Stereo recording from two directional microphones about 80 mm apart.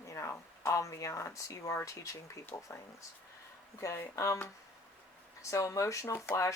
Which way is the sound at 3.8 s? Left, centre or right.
Left.